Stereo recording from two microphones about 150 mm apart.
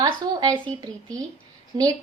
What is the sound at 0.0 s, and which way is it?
Speech, 25° right (ahead or behind).